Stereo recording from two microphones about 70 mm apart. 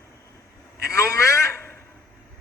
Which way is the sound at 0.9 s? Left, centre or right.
Left.